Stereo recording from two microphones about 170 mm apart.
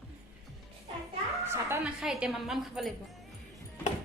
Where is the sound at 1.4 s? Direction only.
15° right (ahead or behind).